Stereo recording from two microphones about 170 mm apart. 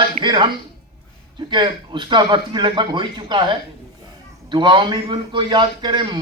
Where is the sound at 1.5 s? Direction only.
25° right (ahead or behind).